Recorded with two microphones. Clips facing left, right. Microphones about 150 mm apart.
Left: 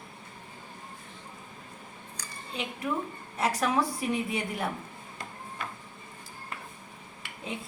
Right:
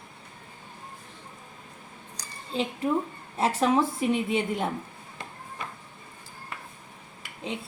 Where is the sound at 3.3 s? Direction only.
30° right (ahead or behind).